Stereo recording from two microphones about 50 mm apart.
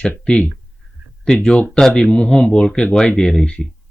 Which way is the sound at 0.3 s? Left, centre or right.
Centre.